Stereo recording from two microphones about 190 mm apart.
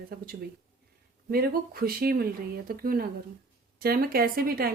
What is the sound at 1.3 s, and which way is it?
A woman's voice, 50° right (ahead or behind).